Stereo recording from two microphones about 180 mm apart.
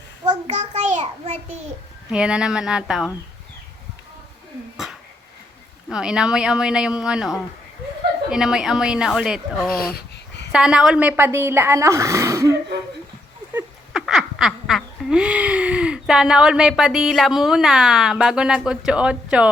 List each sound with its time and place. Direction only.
0.3 s a child's voice: 40° right (ahead or behind)
2.0 s a woman's voice: 5° right (ahead or behind)
5.9 s a woman's voice: 5° right (ahead or behind)
13.9 s laughter: centre (ahead or behind)